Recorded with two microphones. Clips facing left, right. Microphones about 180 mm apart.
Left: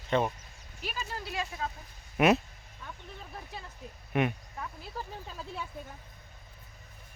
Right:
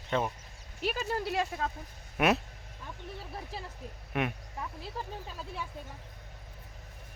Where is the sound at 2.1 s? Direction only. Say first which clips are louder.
Left 3 dB; centre (ahead or behind).